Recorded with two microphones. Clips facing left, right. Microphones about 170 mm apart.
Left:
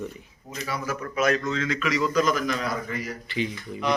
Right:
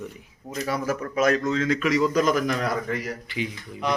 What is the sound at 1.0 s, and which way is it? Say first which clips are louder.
A man's voice: right 1 dB; 35° right (ahead or behind).